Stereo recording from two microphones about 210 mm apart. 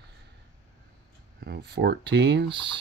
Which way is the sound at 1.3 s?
50° right (ahead or behind).